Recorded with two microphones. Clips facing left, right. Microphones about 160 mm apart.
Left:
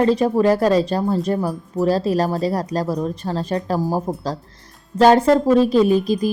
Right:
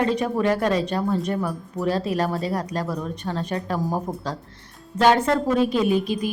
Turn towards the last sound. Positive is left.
turn(degrees=40)  # may be behind; listen again after turning